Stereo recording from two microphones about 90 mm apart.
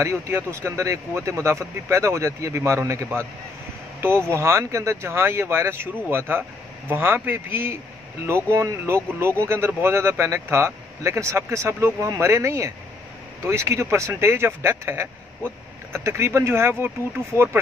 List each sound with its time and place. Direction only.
0.0 s speech: 30° right (ahead or behind)
4.3 s speech: 30° right (ahead or behind)